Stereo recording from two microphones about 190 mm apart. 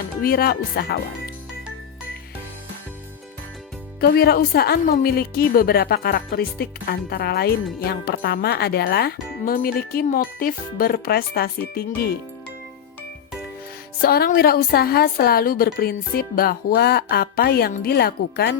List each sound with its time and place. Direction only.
0.2 s speech: 55° left (ahead or behind)
4.0 s a woman's voice: 55° left (ahead or behind)
14.0 s speech: 55° left (ahead or behind)